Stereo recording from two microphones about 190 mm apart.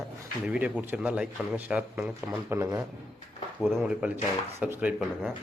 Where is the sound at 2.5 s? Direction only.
15° right (ahead or behind).